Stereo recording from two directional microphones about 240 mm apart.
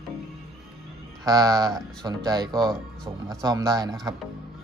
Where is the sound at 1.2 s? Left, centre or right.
Centre.